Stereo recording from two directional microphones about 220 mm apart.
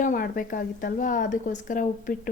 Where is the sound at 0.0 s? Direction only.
35° left (ahead or behind).